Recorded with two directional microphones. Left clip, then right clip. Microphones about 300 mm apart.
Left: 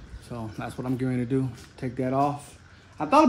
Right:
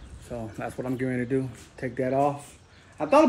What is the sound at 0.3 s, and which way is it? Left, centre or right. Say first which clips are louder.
Speech: right 2 dB; centre.